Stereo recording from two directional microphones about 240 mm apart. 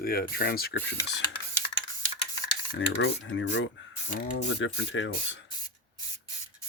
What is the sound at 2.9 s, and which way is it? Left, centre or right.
Speech, left.